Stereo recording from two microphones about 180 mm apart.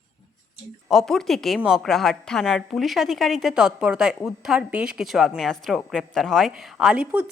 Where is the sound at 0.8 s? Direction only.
Centre (ahead or behind).